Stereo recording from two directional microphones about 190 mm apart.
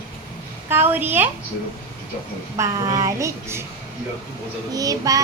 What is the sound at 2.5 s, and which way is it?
Child singing, 15° right (ahead or behind).